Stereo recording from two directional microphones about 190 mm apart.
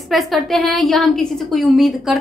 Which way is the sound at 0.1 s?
Centre (ahead or behind).